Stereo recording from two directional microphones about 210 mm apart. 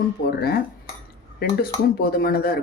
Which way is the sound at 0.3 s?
50° left (ahead or behind).